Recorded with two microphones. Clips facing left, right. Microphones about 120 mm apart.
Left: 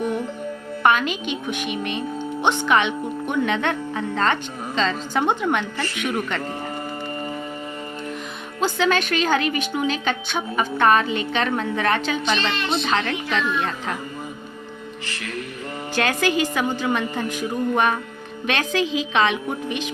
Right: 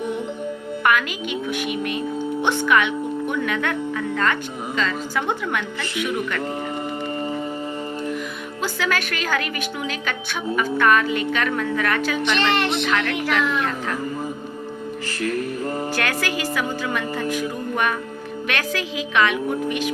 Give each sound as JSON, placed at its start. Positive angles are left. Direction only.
{"t": 0.8, "sound": "a woman's voice", "side_deg": 25}
{"t": 8.6, "sound": "a woman's voice", "side_deg": 25}
{"t": 12.2, "sound": "speech", "side_deg": -75}
{"t": 16.0, "sound": "a woman's voice", "side_deg": 20}